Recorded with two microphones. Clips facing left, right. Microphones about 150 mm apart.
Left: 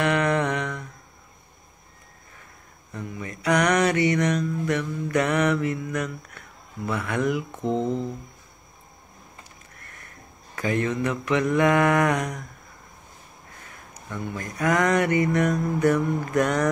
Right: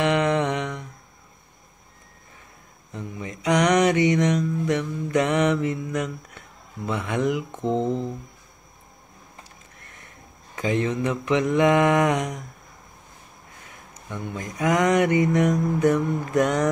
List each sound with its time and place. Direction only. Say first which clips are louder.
0.0 s humming: right 1 dB; 20° right (ahead or behind)
2.9 s mantra: even; 20° right (ahead or behind)
10.5 s mantra: right 1 dB; 20° right (ahead or behind)
13.9 s mantra: even; 20° right (ahead or behind)